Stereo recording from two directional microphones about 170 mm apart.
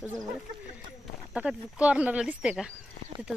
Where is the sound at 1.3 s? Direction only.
5° right (ahead or behind).